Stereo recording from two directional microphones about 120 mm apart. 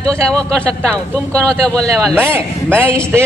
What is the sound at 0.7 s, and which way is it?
Speech, 25° right (ahead or behind).